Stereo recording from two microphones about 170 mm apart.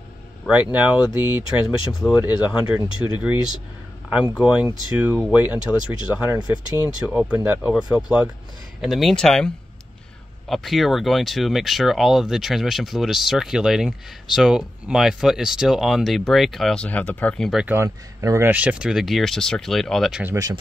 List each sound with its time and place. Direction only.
0.5 s speech: 10° right (ahead or behind)
10.5 s speech: centre (ahead or behind)
17.7 s speech: 15° right (ahead or behind)